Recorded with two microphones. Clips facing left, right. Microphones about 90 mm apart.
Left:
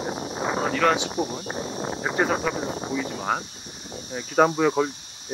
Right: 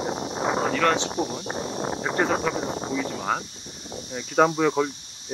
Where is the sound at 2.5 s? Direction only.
20° right (ahead or behind).